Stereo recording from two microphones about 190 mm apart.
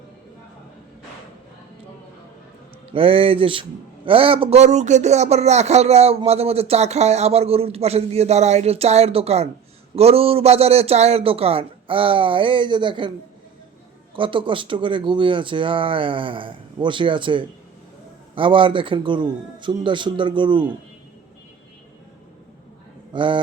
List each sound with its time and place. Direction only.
2.9 s a man's voice: 30° right (ahead or behind)
14.2 s speech: 25° right (ahead or behind)
23.1 s speech: 25° right (ahead or behind)